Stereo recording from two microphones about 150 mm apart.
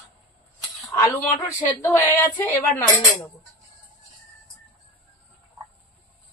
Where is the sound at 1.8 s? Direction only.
15° left (ahead or behind).